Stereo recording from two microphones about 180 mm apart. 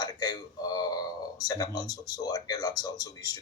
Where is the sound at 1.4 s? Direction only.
20° left (ahead or behind).